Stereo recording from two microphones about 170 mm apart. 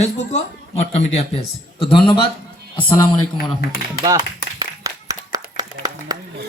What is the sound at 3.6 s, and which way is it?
Speech, 60° left (ahead or behind).